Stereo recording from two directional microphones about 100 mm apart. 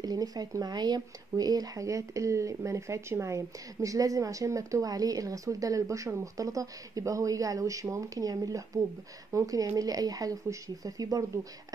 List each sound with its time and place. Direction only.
0.0 s speech: 40° right (ahead or behind)